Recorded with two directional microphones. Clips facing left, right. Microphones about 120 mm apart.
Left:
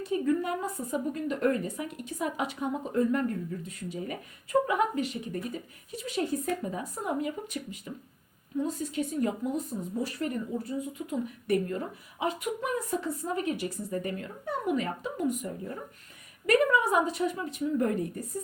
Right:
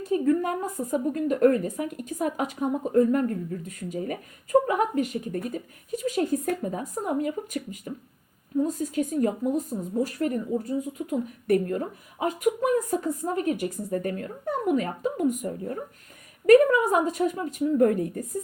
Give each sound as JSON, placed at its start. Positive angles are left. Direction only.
{"t": 0.0, "sound": "a woman's voice", "side_deg": -40}
{"t": 12.9, "sound": "a woman's voice", "side_deg": -40}